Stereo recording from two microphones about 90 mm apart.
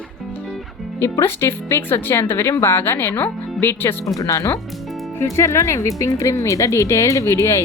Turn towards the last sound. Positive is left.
turn(degrees=30)  # may be behind; listen again after turning